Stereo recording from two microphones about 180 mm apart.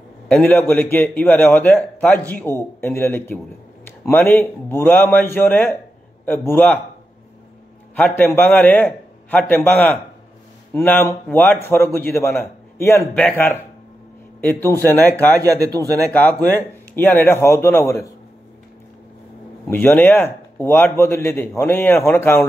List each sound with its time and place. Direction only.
0.3 s a man's voice: 10° left (ahead or behind)
8.0 s a man's voice: 10° left (ahead or behind)
15.4 s speech: 20° right (ahead or behind)
16.5 s a man's voice: 10° left (ahead or behind)
19.7 s a man's voice: 10° left (ahead or behind)